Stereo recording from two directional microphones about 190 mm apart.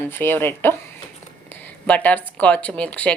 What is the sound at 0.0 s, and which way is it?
Speech, 10° left (ahead or behind).